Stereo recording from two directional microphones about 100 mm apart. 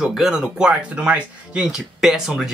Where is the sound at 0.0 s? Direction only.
5° right (ahead or behind).